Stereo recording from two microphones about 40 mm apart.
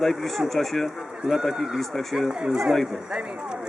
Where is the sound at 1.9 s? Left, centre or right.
Centre.